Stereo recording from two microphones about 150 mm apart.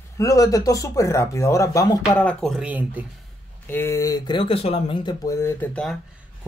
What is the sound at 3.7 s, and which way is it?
Speech, 15° left (ahead or behind).